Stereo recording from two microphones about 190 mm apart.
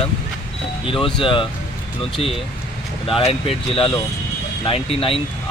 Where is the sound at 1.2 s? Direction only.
25° left (ahead or behind).